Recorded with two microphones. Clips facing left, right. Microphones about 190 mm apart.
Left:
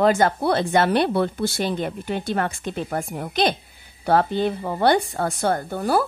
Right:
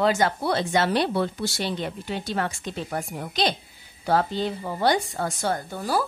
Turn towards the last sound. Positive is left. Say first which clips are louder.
# left 5 dB
turn(degrees=55)  # may be behind; listen again after turning